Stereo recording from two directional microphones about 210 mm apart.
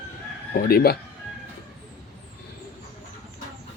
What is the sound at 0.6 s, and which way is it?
Speech, 45° left (ahead or behind).